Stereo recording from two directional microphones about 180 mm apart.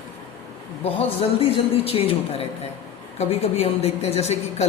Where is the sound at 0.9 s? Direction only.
35° left (ahead or behind).